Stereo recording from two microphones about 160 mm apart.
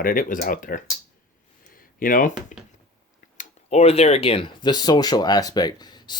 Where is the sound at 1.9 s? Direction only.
60° left (ahead or behind).